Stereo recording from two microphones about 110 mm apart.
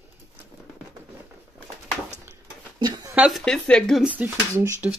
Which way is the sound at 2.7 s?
40° right (ahead or behind).